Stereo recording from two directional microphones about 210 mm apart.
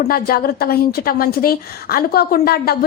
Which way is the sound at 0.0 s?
45° left (ahead or behind).